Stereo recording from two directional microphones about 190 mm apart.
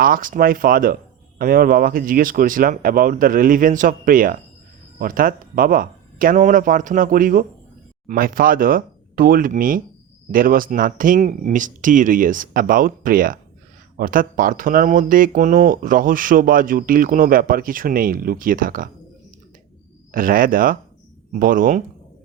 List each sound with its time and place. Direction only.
0.0 s speech: 45° right (ahead or behind)
20.1 s speech: 45° right (ahead or behind)